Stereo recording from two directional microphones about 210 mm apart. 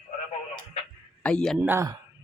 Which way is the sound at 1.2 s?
5° left (ahead or behind).